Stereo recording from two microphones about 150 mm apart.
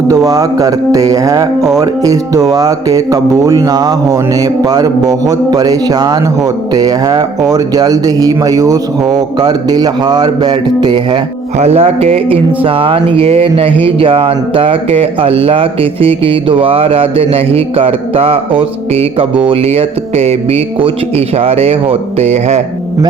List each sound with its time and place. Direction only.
0.1 s speech: 25° right (ahead or behind)
11.5 s speech: 45° right (ahead or behind)